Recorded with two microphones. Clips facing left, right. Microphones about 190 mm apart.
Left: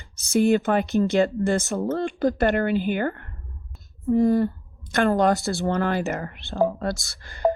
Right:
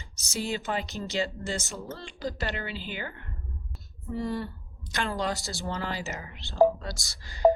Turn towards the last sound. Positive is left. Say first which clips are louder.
# left 5 dB
turn(degrees=55)  # may be behind; listen again after turning